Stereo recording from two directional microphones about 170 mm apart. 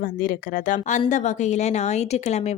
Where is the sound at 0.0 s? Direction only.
55° left (ahead or behind).